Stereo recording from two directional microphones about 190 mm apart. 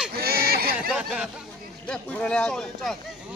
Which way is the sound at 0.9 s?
5° right (ahead or behind).